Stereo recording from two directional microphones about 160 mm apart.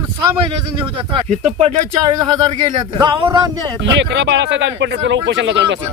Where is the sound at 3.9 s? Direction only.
90° right.